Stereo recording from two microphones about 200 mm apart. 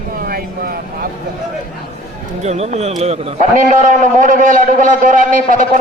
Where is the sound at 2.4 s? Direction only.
35° right (ahead or behind).